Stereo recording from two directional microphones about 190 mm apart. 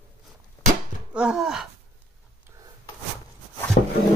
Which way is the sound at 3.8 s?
50° left (ahead or behind).